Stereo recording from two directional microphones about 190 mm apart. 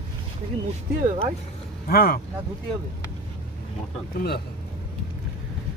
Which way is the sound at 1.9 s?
50° left (ahead or behind).